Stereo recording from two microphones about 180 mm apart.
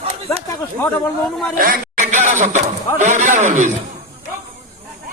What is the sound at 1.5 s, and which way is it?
A man's voice, 50° right (ahead or behind).